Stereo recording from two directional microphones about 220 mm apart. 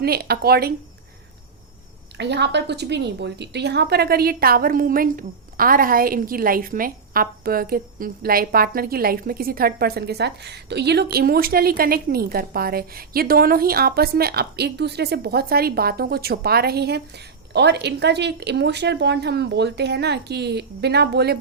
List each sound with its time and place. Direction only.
0.0 s a woman's voice: 45° right (ahead or behind)
2.1 s a woman's voice: 50° right (ahead or behind)